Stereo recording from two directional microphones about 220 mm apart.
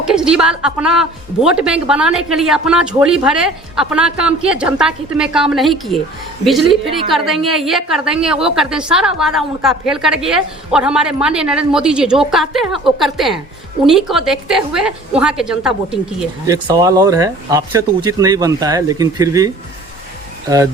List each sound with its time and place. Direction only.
0.0 s a woman's voice: 5° right (ahead or behind)
16.5 s speech: 15° right (ahead or behind)